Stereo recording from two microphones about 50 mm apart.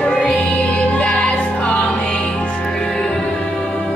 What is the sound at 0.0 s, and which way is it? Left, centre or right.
Music, left.